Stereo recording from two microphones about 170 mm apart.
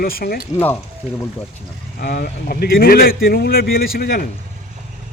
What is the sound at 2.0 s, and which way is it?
Speech, 65° left (ahead or behind).